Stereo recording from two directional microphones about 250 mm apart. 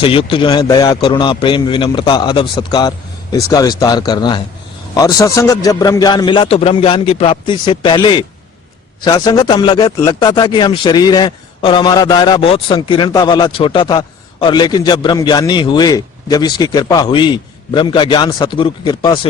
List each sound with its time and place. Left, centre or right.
0.0 s a man's voice: left